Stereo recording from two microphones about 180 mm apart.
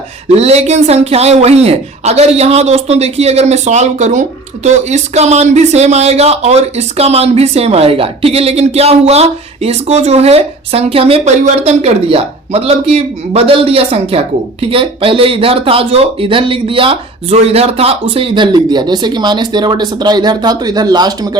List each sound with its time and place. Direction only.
0.3 s a man's voice: 35° right (ahead or behind)